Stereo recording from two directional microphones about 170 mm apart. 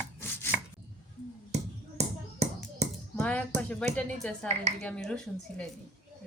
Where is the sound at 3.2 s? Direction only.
5° left (ahead or behind).